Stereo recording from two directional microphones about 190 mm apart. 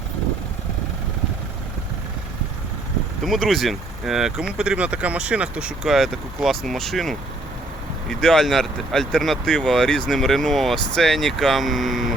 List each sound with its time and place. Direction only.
3.2 s speech: centre (ahead or behind)
8.2 s speech: centre (ahead or behind)